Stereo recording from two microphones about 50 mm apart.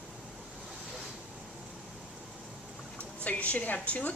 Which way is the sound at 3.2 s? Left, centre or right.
Left.